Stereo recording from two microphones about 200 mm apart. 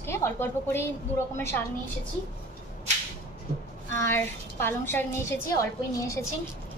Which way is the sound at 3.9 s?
10° left (ahead or behind).